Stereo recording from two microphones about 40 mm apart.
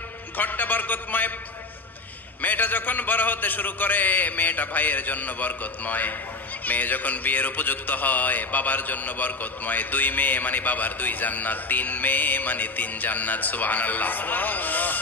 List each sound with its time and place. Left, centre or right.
0.4 s a man's voice: left
2.4 s a man's voice: left